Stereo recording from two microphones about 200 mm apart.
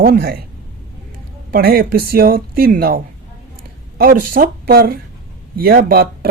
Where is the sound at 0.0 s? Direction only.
50° right (ahead or behind).